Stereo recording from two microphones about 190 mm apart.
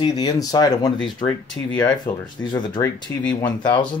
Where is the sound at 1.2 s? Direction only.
5° left (ahead or behind); by 3.4 s 20° left (ahead or behind).